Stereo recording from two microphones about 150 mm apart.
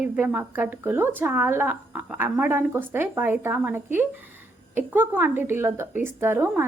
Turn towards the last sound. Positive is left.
turn(degrees=-15)  # may be behind; listen again after turning